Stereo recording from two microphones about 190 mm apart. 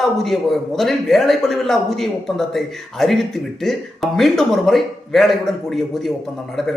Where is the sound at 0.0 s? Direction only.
Centre (ahead or behind).